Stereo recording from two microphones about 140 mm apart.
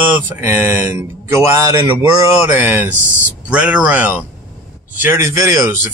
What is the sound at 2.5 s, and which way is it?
Speech, 15° right (ahead or behind).